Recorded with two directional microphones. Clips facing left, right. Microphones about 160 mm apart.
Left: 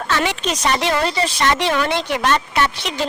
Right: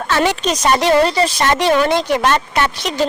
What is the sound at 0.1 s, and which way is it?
A woman's voice, 40° right (ahead or behind).